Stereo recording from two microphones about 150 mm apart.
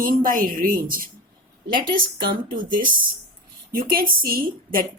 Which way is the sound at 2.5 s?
70° right (ahead or behind).